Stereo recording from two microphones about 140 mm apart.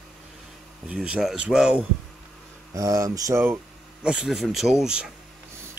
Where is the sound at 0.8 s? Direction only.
5° right (ahead or behind).